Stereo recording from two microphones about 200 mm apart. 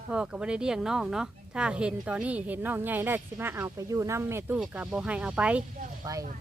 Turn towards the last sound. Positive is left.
turn(degrees=-20)  # may be behind; listen again after turning